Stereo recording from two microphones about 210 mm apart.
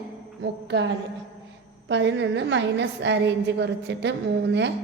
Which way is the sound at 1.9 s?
60° right (ahead or behind).